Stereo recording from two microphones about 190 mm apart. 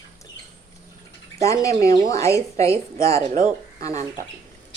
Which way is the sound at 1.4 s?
15° left (ahead or behind).